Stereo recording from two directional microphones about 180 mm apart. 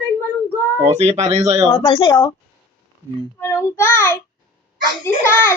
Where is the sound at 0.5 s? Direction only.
15° right (ahead or behind).